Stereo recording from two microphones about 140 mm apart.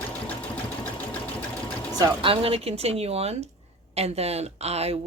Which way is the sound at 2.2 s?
40° right (ahead or behind).